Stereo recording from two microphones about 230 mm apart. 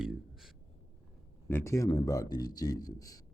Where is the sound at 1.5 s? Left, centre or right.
Centre.